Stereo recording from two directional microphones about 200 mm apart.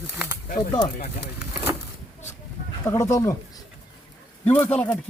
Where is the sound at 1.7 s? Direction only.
15° right (ahead or behind).